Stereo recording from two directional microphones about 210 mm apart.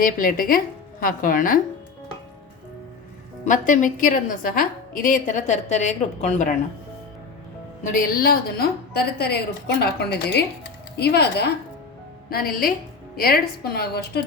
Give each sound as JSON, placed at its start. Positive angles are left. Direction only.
{"t": 0.0, "sound": "a woman's voice", "side_deg": 40}
{"t": 3.4, "sound": "a woman's voice", "side_deg": 40}
{"t": 7.9, "sound": "a woman's voice", "side_deg": 45}